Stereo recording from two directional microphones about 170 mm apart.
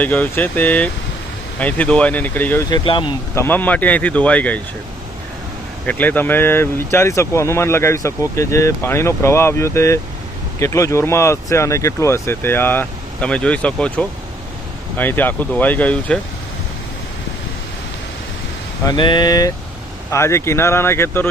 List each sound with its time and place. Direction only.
0.0 s speech: 10° left (ahead or behind)
2.6 s speech: 25° left (ahead or behind)
3.3 s speech: 10° left (ahead or behind)
5.8 s speech: 10° left (ahead or behind)
18.9 s speech: 25° left (ahead or behind)